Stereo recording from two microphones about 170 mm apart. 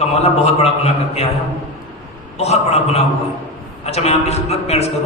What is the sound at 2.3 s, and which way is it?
A man's voice, 40° left (ahead or behind).